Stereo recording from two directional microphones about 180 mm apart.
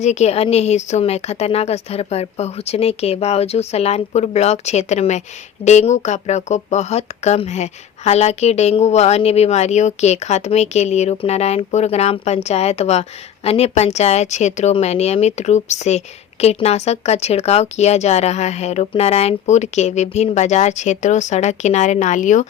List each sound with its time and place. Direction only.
0.0 s speech: 40° left (ahead or behind)